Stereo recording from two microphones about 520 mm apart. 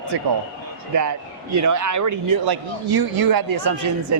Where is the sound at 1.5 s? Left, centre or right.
Right.